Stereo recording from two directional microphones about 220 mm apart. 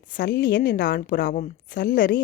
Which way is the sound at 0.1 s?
40° left (ahead or behind).